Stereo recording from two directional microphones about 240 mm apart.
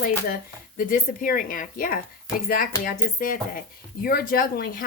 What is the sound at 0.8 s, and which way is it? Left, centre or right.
Speech, left.